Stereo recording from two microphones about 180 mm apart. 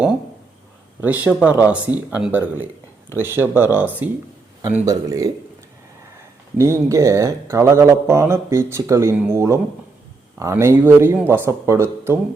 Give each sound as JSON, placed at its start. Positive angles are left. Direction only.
{"t": 1.0, "sound": "speech", "side_deg": -10}
{"t": 6.6, "sound": "speech", "side_deg": -15}